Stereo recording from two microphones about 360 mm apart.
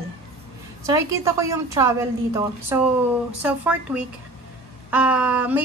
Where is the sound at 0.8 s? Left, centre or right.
Centre.